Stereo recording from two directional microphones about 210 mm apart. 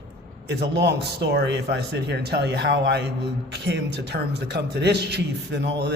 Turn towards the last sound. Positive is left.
turn(degrees=-55)  # may be behind; listen again after turning